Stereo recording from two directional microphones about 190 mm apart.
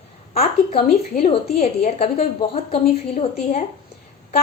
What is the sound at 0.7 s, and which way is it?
A woman's voice, 35° left (ahead or behind).